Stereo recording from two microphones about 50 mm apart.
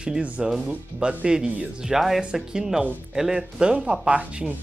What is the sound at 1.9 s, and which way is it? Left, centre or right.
Speech, centre.